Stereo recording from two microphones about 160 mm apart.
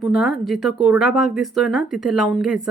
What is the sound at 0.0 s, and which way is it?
Speech, 5° right (ahead or behind).